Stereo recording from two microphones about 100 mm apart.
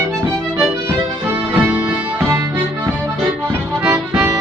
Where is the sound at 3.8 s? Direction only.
20° right (ahead or behind).